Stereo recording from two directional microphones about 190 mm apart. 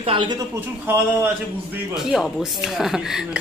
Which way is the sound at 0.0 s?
25° right (ahead or behind).